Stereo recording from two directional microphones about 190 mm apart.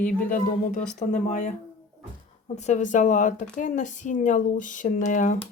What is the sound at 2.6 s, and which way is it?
Speech, 35° left (ahead or behind).